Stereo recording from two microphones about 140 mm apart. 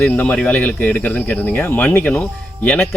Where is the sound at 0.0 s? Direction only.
10° left (ahead or behind).